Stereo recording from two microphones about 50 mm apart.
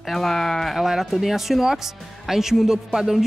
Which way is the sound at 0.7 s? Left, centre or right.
Centre.